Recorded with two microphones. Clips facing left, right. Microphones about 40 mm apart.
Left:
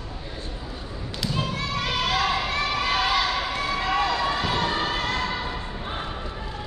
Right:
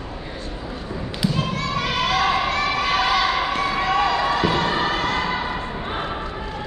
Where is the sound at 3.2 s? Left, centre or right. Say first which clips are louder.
Right 5 dB; centre.